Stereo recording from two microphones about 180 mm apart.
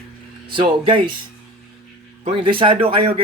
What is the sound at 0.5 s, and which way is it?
Speech, 30° right (ahead or behind).